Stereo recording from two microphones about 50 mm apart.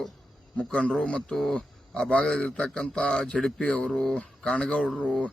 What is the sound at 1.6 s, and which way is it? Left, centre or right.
A man's voice, left.